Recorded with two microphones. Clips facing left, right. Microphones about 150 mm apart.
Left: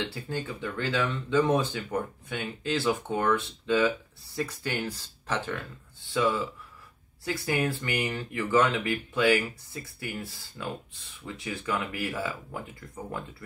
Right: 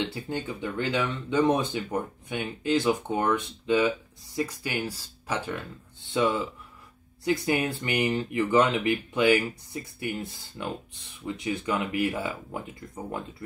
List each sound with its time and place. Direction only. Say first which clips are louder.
0.0 s speech: right 2 dB; 20° right (ahead or behind)